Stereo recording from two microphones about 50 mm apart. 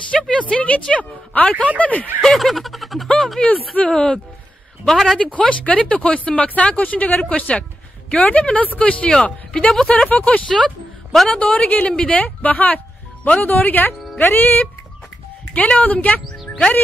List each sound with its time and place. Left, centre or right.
0.1 s speech: centre
2.3 s a sound: centre
3.7 s speech: left
4.8 s a sound: centre
5.2 s speech: left
15.5 s speech: left